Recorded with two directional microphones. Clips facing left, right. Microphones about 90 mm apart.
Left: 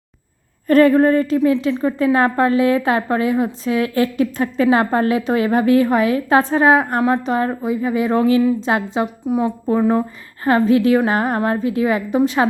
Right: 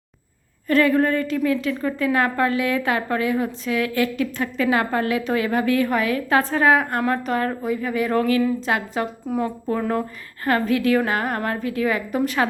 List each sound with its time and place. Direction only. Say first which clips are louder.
0.7 s a woman's voice: left 6 dB; 35° left (ahead or behind)